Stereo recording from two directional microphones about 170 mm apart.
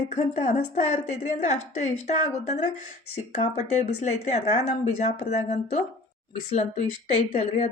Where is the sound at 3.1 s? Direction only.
45° left (ahead or behind).